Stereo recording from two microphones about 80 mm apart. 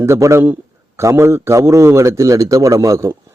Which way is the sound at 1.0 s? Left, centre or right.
Right.